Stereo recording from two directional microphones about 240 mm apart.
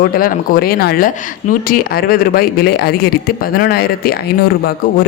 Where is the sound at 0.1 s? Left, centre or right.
Left.